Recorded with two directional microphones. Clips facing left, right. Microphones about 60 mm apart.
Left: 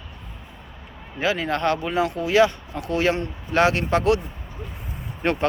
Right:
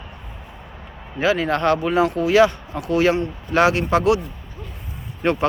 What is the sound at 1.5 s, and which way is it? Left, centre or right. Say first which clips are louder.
Speech: right 4 dB; right.